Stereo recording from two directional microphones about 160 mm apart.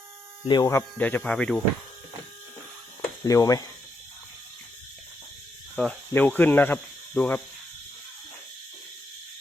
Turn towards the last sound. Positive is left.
turn(degrees=10)  # may be behind; listen again after turning